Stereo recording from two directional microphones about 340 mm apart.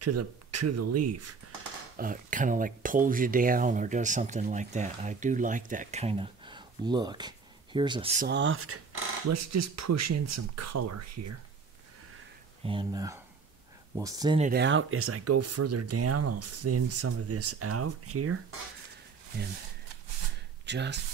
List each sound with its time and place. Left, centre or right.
0.0 s speech: right
2.0 s speech: right
9.3 s speech: right
12.6 s speech: centre
14.5 s speech: right
20.6 s speech: right